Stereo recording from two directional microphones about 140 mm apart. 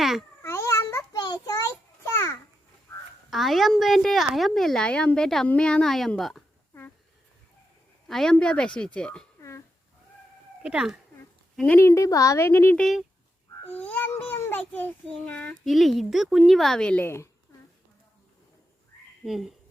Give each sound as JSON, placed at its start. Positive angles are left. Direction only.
{"t": 0.0, "sound": "a sound", "side_deg": 0}
{"t": 0.4, "sound": "a sound", "side_deg": 20}
{"t": 3.2, "sound": "a woman's voice", "side_deg": 0}
{"t": 8.0, "sound": "a child's voice", "side_deg": 0}
{"t": 9.4, "sound": "a sound", "side_deg": 20}
{"t": 10.6, "sound": "speech", "side_deg": -5}
{"t": 11.5, "sound": "a woman's voice", "side_deg": 10}
{"t": 11.8, "sound": "a child's voice", "side_deg": 20}
{"t": 12.8, "sound": "a woman's voice", "side_deg": 0}
{"t": 13.7, "sound": "a child's voice", "side_deg": 10}
{"t": 19.2, "sound": "a woman's voice", "side_deg": 0}